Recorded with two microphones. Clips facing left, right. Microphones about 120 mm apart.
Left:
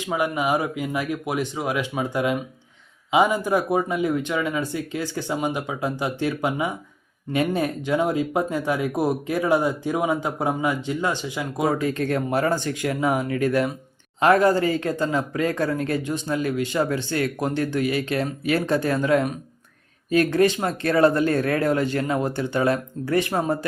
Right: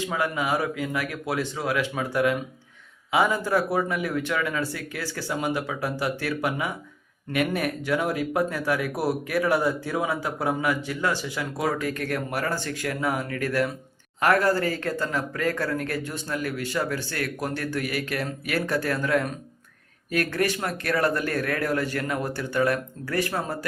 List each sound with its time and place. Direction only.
0.0 s speech: 15° left (ahead or behind)